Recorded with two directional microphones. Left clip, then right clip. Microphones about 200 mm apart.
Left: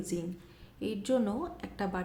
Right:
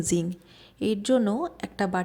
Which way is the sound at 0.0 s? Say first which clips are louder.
Right 9 dB; 45° right (ahead or behind).